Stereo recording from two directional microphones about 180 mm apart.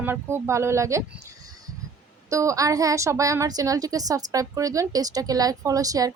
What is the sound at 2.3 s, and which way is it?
A woman's voice, 15° right (ahead or behind).